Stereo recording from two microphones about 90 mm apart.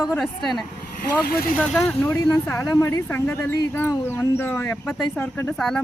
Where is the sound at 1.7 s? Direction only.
10° left (ahead or behind).